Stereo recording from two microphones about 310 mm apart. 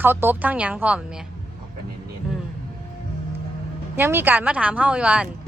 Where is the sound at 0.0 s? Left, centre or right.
Centre.